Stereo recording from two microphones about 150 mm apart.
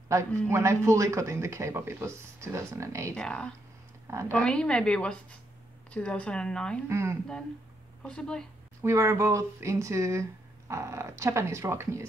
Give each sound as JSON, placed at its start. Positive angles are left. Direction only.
{"t": 0.5, "sound": "speech", "side_deg": -20}
{"t": 3.2, "sound": "speech", "side_deg": 5}
{"t": 6.9, "sound": "speech", "side_deg": -20}
{"t": 8.0, "sound": "speech", "side_deg": 5}
{"t": 8.8, "sound": "speech", "side_deg": -20}